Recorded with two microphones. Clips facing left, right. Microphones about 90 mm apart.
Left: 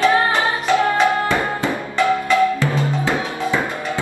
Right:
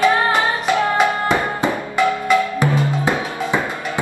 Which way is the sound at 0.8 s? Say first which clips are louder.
Even; 20° right (ahead or behind).